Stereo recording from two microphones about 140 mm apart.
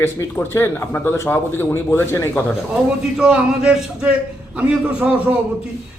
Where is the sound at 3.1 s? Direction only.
5° right (ahead or behind).